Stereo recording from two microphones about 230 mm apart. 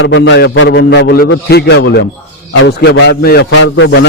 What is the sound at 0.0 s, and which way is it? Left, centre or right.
A man's voice, left.